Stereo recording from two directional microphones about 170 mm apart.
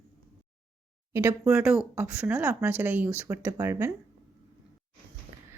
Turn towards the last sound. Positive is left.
turn(degrees=-60)  # may be behind; listen again after turning